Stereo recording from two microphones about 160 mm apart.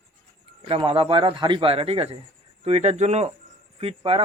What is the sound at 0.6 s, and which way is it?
Speech, 35° right (ahead or behind).